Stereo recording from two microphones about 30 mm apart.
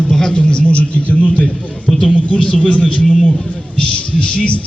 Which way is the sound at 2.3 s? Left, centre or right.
Left.